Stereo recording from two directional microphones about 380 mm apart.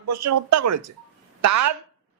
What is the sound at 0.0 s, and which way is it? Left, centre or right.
Speech, right.